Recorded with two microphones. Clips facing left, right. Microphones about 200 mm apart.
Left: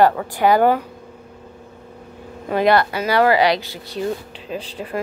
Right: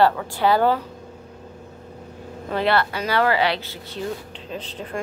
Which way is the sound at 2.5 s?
15° left (ahead or behind).